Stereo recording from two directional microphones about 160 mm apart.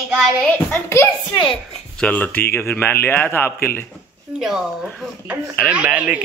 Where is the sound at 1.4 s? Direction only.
35° left (ahead or behind).